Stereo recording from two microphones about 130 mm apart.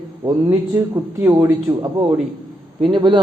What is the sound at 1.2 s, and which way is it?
Speech, 25° right (ahead or behind).